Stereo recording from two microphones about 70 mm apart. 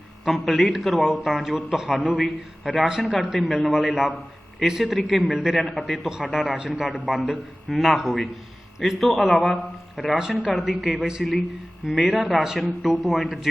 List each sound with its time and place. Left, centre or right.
0.3 s speech: centre
2.0 s speech: centre
6.5 s a man's voice: centre
7.1 s speech: centre